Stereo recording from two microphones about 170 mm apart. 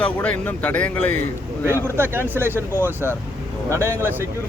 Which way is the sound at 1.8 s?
15° right (ahead or behind).